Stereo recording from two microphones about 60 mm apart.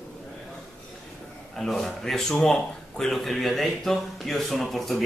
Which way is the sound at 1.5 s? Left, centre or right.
Centre.